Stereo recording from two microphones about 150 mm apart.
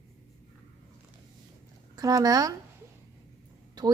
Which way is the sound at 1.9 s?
25° right (ahead or behind).